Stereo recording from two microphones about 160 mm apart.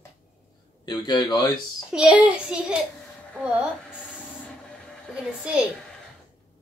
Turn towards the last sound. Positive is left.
turn(degrees=-5)  # may be behind; listen again after turning